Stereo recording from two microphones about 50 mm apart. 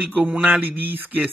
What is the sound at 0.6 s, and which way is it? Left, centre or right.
Speech, right.